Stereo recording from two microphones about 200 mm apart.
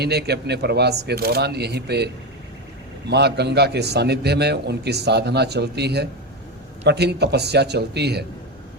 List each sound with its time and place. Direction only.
0.0 s a man's voice: 55° right (ahead or behind)
3.1 s a man's voice: 55° right (ahead or behind)